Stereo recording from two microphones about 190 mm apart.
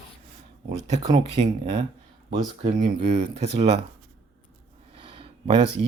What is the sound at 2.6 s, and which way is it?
Speech, 40° right (ahead or behind).